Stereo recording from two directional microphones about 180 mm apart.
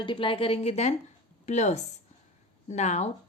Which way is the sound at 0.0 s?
30° left (ahead or behind).